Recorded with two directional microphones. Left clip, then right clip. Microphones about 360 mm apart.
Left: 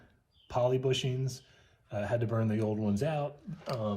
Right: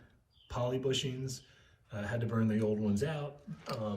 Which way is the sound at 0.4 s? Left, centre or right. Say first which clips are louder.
Left 5 dB; centre.